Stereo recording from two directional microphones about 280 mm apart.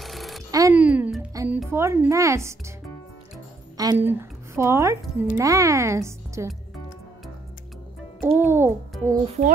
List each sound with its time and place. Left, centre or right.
0.0 s a sound: centre
0.5 s a child's voice: centre
3.7 s a woman's voice: centre
8.2 s speech: centre
9.2 s speech: right